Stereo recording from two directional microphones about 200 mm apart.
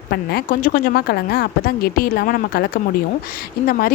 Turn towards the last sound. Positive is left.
turn(degrees=45)  # may be behind; listen again after turning